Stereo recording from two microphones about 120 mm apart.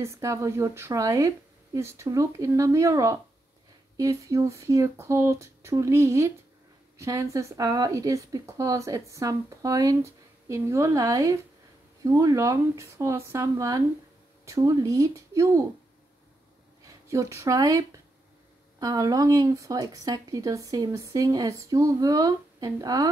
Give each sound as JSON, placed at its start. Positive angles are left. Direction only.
{"t": 0.0, "sound": "speech", "side_deg": -25}
{"t": 16.8, "sound": "speech", "side_deg": -25}